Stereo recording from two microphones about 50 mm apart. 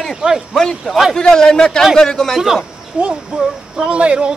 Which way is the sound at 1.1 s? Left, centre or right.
Centre.